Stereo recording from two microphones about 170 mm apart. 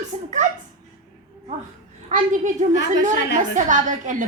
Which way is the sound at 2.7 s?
90° left.